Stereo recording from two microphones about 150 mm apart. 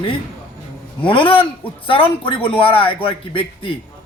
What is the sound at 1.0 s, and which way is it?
Speech, 35° left (ahead or behind).